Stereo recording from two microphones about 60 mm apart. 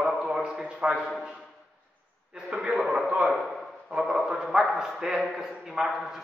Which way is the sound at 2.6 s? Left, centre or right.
Centre.